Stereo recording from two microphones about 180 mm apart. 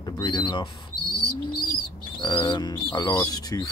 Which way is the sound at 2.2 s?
25° left (ahead or behind).